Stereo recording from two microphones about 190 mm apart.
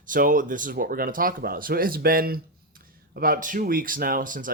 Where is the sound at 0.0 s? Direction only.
45° right (ahead or behind).